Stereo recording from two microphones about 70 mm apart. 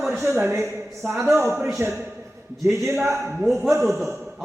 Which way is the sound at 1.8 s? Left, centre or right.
Right.